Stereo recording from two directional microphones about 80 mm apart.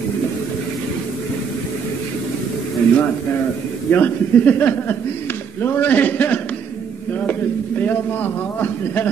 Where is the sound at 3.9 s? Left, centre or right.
Left.